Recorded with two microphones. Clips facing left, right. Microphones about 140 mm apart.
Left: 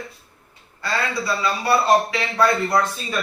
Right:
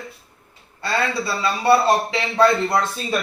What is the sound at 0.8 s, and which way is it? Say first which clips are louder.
A man's voice: right 2 dB; 25° right (ahead or behind).